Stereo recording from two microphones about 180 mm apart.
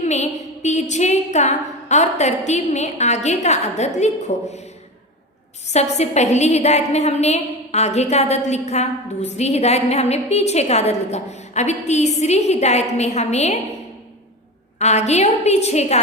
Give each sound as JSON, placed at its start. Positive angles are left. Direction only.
{"t": 0.0, "sound": "a woman's voice", "side_deg": 40}
{"t": 5.6, "sound": "a woman's voice", "side_deg": 40}
{"t": 14.8, "sound": "a woman's voice", "side_deg": 40}